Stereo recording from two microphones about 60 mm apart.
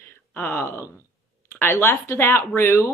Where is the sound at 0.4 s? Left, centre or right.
Left.